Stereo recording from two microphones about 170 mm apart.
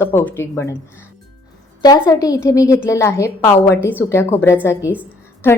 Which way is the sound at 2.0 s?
20° left (ahead or behind).